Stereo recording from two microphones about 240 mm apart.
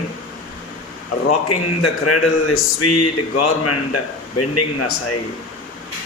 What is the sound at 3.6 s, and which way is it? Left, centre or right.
A man's voice, left.